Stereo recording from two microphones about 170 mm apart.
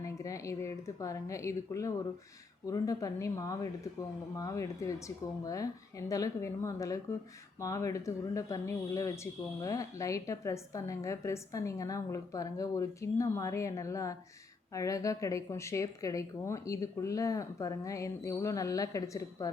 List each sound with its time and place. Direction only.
0.0 s speech: 20° left (ahead or behind)